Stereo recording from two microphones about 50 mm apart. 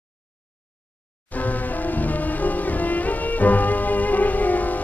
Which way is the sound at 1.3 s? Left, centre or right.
Left.